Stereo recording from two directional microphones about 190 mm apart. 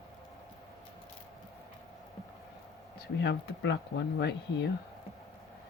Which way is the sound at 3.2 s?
65° left (ahead or behind).